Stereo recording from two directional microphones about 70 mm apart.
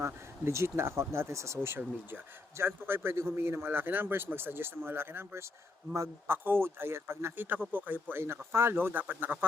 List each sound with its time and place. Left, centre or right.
0.0 s a man's voice: right
8.1 s a man's voice: right